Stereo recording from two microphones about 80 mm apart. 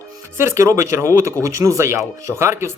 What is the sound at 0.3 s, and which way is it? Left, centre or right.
Speech, right.